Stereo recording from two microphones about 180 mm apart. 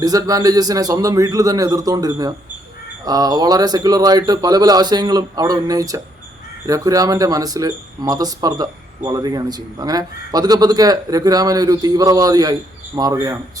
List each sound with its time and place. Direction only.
0.0 s speech: 20° right (ahead or behind)